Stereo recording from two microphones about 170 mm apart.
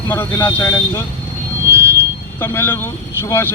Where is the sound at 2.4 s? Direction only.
15° left (ahead or behind).